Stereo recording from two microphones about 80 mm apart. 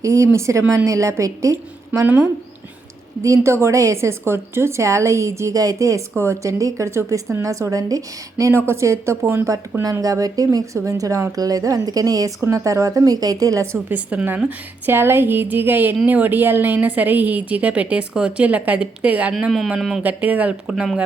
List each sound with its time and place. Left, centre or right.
0.0 s a woman's voice: right
2.0 s a woman's voice: right
3.2 s a woman's voice: right
9.9 s a woman's voice: right
12.4 s a woman's voice: right
13.9 s a woman's voice: centre
14.8 s a woman's voice: right
19.4 s speech: centre
20.0 s speech: right